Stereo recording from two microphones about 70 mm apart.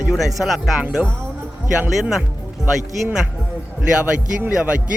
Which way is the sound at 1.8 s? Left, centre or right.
Centre.